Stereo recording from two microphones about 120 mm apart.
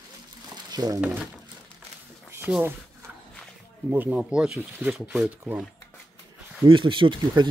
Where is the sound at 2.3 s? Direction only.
15° right (ahead or behind).